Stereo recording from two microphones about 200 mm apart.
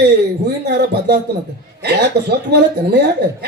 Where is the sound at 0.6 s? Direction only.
55° right (ahead or behind).